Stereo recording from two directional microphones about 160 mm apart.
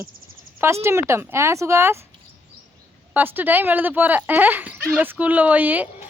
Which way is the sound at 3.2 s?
10° right (ahead or behind).